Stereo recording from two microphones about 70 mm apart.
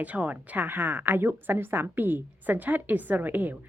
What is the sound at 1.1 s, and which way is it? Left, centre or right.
Speech, right.